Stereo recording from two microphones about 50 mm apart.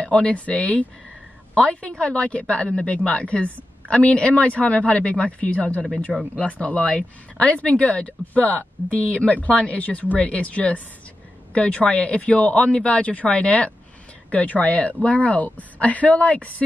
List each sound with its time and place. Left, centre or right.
0.0 s speech: left